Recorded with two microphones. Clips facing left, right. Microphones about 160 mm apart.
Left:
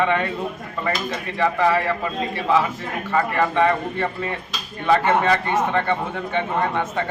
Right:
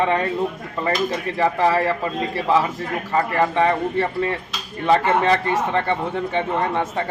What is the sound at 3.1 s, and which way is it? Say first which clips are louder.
Speech: even; 30° right (ahead or behind).